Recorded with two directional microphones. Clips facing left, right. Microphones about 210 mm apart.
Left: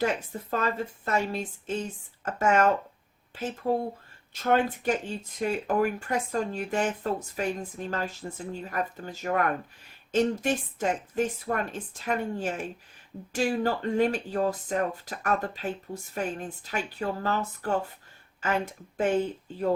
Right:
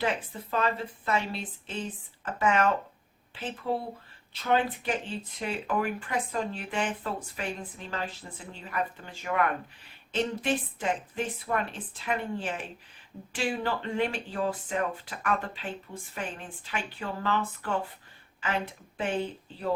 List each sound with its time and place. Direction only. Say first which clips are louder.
0.0 s speech: left 3 dB; 45° left (ahead or behind)